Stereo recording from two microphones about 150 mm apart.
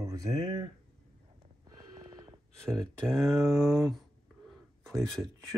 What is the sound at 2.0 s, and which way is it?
Gasp, 25° right (ahead or behind).